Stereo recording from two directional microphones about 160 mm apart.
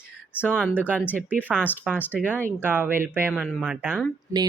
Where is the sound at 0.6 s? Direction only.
10° right (ahead or behind).